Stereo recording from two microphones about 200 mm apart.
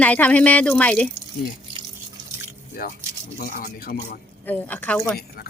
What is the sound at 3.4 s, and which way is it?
Speech, 45° left (ahead or behind).